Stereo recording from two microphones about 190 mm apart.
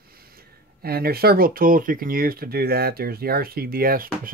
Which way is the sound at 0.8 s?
55° right (ahead or behind).